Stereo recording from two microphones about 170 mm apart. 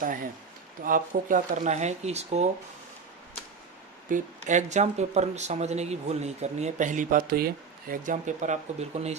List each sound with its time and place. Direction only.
0.8 s speech: 55° right (ahead or behind)
4.1 s speech: 45° right (ahead or behind)